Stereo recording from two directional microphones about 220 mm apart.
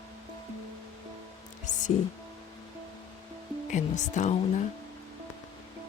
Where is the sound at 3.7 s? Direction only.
35° left (ahead or behind).